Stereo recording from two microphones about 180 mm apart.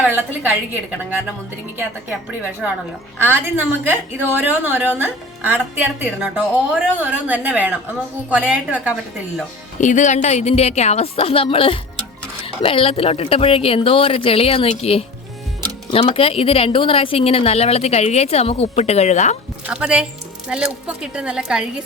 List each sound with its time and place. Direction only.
0.0 s a woman's voice: 10° right (ahead or behind)
9.8 s speech: 45° left (ahead or behind)
19.6 s a woman's voice: 5° right (ahead or behind)